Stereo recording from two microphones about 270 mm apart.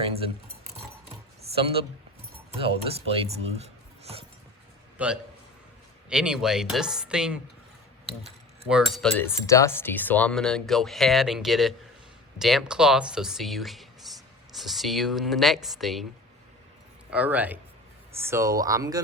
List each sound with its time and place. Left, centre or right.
0.0 s speech: right
1.5 s speech: right
6.1 s cutlery: centre
8.7 s cutlery: centre
14.0 s a sound: centre
14.5 s cutlery: centre
17.1 s speech: centre